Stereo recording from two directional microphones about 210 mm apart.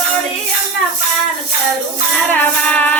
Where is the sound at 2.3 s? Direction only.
5° left (ahead or behind).